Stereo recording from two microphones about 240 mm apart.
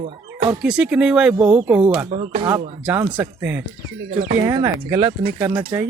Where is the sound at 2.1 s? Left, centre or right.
Right.